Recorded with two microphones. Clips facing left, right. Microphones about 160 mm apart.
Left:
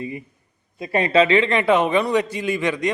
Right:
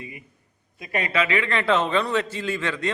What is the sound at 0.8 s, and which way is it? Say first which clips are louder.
A man's voice: left 8 dB; 30° left (ahead or behind).